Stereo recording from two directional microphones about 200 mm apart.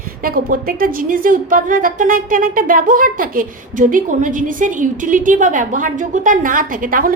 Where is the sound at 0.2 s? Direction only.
45° right (ahead or behind).